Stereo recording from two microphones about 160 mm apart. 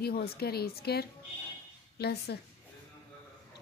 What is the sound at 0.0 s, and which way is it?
Speech, 75° left (ahead or behind).